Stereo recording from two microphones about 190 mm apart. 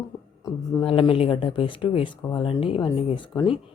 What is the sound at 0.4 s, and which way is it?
Speech, 20° left (ahead or behind).